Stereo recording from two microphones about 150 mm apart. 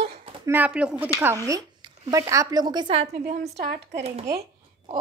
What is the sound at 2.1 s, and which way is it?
A woman's voice, 20° right (ahead or behind).